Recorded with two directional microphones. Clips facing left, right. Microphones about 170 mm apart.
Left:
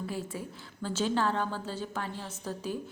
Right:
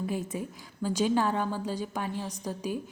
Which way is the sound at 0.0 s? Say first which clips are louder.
Right 4 dB; 20° right (ahead or behind).